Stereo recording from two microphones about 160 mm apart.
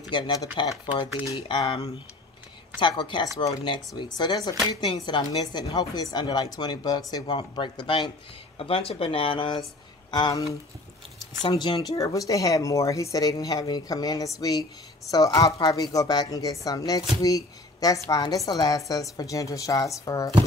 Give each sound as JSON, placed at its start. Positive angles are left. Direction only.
{"t": 0.1, "sound": "speech", "side_deg": 25}
{"t": 3.0, "sound": "speech", "side_deg": 30}
{"t": 11.4, "sound": "speech", "side_deg": 30}